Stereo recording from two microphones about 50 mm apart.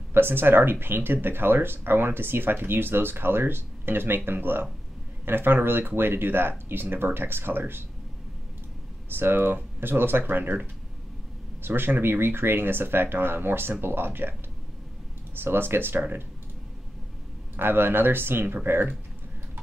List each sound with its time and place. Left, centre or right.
0.1 s speech: right
9.1 s speech: right
15.3 s speech: right
17.6 s speech: right